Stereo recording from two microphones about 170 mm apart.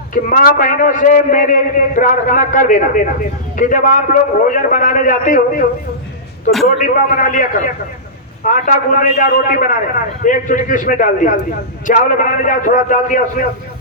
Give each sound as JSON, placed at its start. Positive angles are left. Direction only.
{"t": 0.1, "sound": "a man's voice", "side_deg": 55}
{"t": 6.7, "sound": "a man's voice", "side_deg": 55}